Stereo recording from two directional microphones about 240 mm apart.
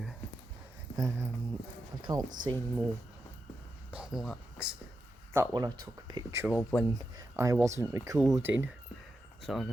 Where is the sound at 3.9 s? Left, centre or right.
Centre.